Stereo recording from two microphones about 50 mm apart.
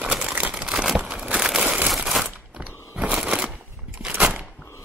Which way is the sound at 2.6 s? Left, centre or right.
Right.